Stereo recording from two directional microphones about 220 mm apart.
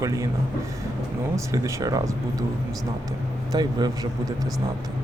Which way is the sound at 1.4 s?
15° right (ahead or behind).